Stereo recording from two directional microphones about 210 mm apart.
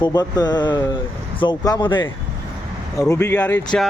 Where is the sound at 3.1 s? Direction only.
15° left (ahead or behind).